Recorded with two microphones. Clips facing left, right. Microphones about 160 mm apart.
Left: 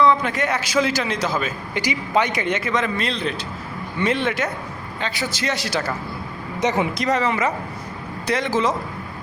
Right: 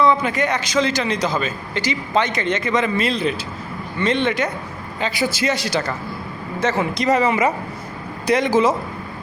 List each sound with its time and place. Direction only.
0.0 s a man's voice: centre (ahead or behind)
4.9 s a man's voice: 5° right (ahead or behind)
6.6 s speech: 15° left (ahead or behind)
6.9 s a man's voice: centre (ahead or behind)
7.2 s speech: 10° right (ahead or behind)